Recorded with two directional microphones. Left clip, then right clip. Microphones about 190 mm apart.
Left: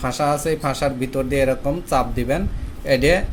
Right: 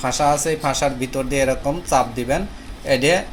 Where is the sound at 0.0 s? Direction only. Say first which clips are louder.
Right 2 dB; 35° left (ahead or behind).